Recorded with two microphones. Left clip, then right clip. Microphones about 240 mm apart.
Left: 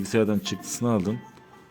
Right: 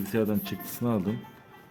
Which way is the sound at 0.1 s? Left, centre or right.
Centre.